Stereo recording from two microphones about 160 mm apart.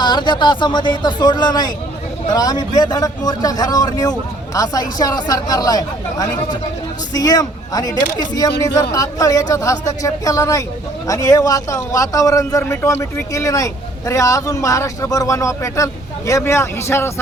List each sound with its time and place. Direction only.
0.0 s a man's voice: 30° left (ahead or behind)